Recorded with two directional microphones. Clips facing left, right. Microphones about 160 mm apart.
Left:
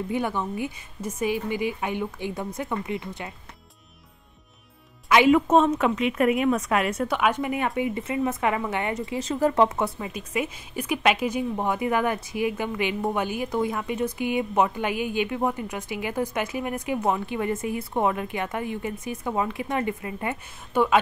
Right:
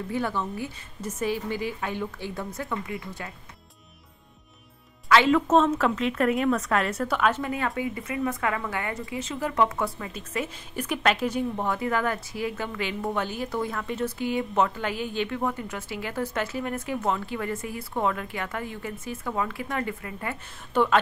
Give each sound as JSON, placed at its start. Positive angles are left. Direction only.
{"t": 0.1, "sound": "a woman's voice", "side_deg": 15}
{"t": 5.0, "sound": "a woman's voice", "side_deg": 15}
{"t": 9.2, "sound": "speech", "side_deg": 40}
{"t": 9.9, "sound": "a woman's voice", "side_deg": 15}
{"t": 20.7, "sound": "a woman's voice", "side_deg": 10}